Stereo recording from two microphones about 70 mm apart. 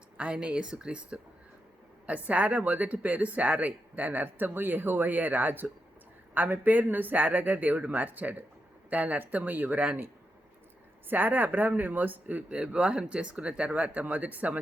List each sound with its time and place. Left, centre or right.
0.2 s a woman's voice: centre
11.1 s a woman's voice: right